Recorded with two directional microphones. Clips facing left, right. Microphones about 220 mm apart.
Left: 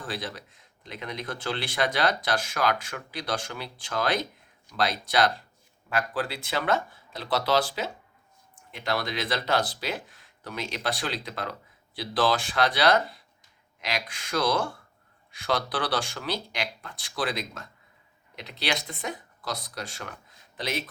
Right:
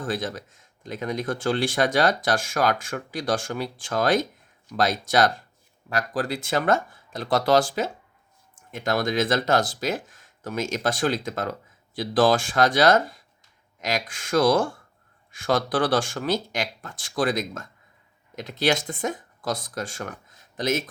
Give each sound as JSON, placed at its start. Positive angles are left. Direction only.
{"t": 0.0, "sound": "speech", "side_deg": -45}